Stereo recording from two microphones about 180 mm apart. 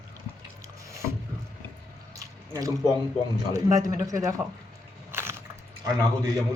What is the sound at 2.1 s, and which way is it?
Drip, 20° right (ahead or behind).